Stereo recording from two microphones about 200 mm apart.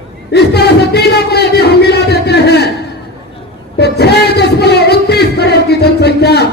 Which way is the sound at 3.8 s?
55° left (ahead or behind).